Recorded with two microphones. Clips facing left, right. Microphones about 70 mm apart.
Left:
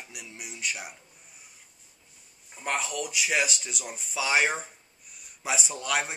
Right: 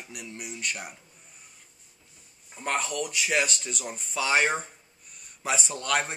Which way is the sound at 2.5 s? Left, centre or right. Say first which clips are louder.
Right 2 dB; centre.